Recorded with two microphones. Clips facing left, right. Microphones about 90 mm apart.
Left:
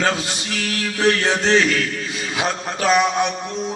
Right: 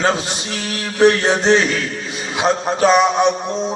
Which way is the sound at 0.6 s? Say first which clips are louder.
Right 7 dB; 25° right (ahead or behind).